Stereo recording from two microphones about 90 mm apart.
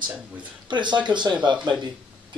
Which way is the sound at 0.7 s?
60° right (ahead or behind).